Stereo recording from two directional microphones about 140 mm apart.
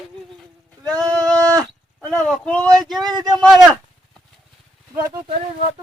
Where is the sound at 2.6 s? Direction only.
25° right (ahead or behind).